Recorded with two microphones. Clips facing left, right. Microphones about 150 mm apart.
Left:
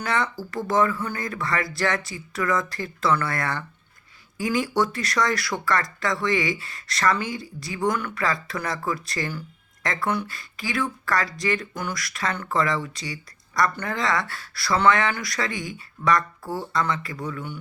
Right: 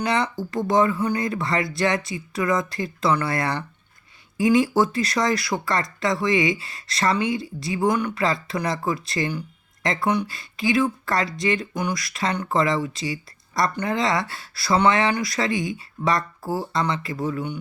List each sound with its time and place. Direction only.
0.0 s speech: 20° right (ahead or behind)